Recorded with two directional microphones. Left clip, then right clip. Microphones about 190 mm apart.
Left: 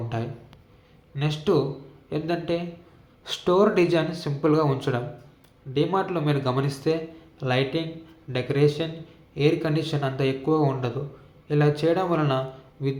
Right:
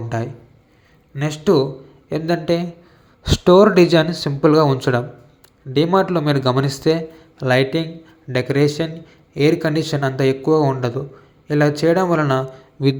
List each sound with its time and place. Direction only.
0.1 s a man's voice: 40° right (ahead or behind)